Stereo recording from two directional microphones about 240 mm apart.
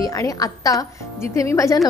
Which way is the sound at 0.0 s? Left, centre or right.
Centre.